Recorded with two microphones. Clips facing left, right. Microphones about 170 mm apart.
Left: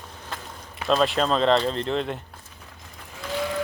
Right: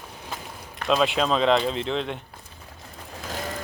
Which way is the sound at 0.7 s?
Centre (ahead or behind).